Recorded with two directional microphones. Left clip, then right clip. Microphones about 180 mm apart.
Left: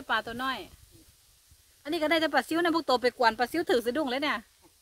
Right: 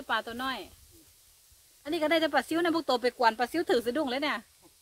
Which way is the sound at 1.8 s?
35° left (ahead or behind).